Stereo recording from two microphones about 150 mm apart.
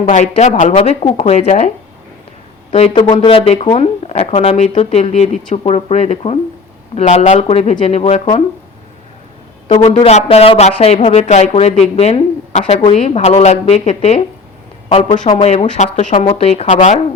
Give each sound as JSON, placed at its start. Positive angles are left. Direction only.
{"t": 0.0, "sound": "speech", "side_deg": 55}
{"t": 0.8, "sound": "speech", "side_deg": 40}
{"t": 2.7, "sound": "speech", "side_deg": 40}
{"t": 9.7, "sound": "speech", "side_deg": 45}
{"t": 15.3, "sound": "speech", "side_deg": 40}
{"t": 16.1, "sound": "speech", "side_deg": 40}